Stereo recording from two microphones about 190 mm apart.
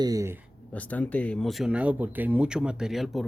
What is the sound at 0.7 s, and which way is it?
Speech, 10° left (ahead or behind).